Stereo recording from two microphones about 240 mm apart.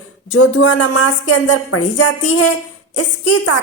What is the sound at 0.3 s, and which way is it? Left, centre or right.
A woman's voice, left.